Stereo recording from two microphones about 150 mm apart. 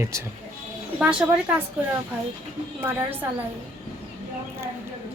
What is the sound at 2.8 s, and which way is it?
Speech, 15° right (ahead or behind).